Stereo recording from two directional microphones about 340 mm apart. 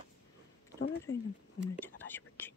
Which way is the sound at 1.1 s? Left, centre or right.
Left.